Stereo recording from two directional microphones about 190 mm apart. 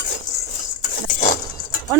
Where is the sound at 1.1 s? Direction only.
40° left (ahead or behind).